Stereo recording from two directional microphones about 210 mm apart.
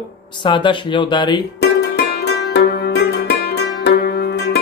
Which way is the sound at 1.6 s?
50° left (ahead or behind).